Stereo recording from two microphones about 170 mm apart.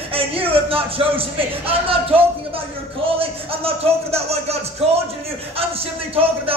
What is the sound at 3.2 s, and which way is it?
A man's voice, 35° right (ahead or behind).